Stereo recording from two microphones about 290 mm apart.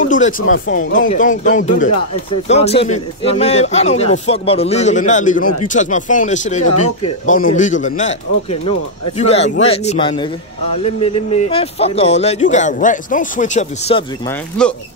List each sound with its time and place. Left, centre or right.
0.0 s a sound: left
0.4 s speech: left
0.7 s a man's voice: left
11.3 s a man's voice: left
14.6 s speech: centre